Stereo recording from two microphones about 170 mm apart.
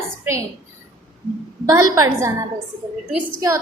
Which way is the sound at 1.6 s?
20° right (ahead or behind).